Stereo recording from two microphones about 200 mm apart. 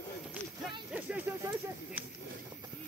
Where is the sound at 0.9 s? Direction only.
5° right (ahead or behind).